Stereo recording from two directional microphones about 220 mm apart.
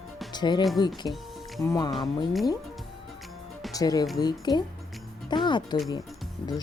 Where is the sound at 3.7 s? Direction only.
15° left (ahead or behind).